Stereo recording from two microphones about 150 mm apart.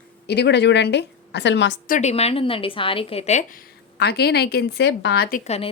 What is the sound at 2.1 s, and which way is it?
A woman's voice, 40° left (ahead or behind).